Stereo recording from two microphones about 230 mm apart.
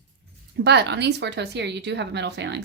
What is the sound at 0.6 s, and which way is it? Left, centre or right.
Speech, right.